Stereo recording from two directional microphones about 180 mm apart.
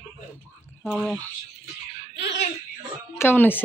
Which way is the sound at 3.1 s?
10° left (ahead or behind).